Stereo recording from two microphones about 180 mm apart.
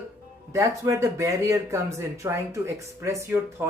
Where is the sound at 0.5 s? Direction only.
15° right (ahead or behind).